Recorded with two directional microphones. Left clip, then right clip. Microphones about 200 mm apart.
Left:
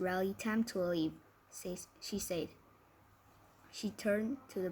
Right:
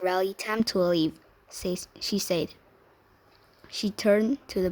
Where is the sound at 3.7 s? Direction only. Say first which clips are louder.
Right 12 dB; 55° right (ahead or behind).